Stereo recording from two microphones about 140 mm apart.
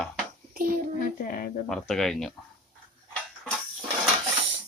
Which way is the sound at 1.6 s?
5° left (ahead or behind).